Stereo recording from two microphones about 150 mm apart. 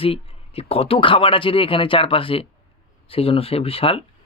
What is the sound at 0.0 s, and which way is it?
A woman's voice, 40° left (ahead or behind).